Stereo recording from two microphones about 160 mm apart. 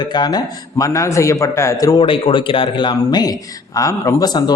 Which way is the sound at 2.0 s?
35° left (ahead or behind).